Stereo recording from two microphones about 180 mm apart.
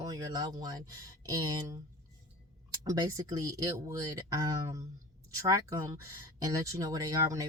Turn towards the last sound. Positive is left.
turn(degrees=-20)  # may be behind; listen again after turning